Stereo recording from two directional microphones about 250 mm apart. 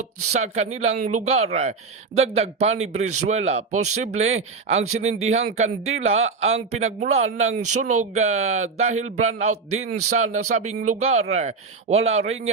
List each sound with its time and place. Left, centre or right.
0.3 s a man's voice: right
10.2 s speech: right
10.8 s a man's voice: right